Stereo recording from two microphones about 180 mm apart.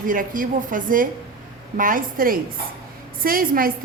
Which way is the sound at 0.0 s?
50° right (ahead or behind).